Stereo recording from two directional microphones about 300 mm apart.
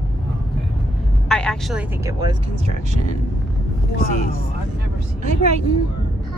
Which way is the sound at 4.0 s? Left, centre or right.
Left.